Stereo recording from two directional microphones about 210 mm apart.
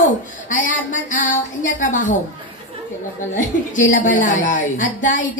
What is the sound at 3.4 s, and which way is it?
Speech, 40° left (ahead or behind).